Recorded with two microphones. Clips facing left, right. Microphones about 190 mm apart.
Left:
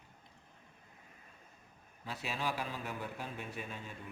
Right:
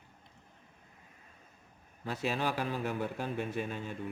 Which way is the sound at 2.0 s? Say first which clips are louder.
Right 6 dB; 45° right (ahead or behind).